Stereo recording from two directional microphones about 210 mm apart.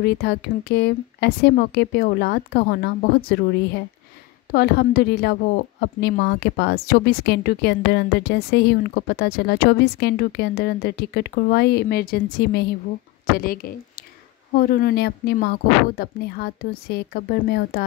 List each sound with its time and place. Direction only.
0.0 s a woman's voice: 50° left (ahead or behind)